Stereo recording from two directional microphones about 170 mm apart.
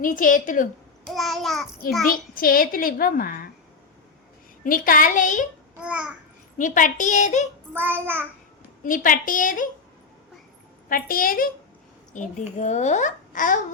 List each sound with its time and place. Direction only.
0.0 s a child's voice: 55° left (ahead or behind)
1.0 s babbling: centre (ahead or behind)
2.0 s a woman's voice: 55° left (ahead or behind)
4.6 s a child's voice: 55° left (ahead or behind)
5.8 s child singing: 5° right (ahead or behind)
6.6 s a child's voice: 50° left (ahead or behind)
7.7 s child singing: 10° right (ahead or behind)
8.8 s a child's voice: 50° left (ahead or behind)
10.8 s a woman's voice: 55° left (ahead or behind)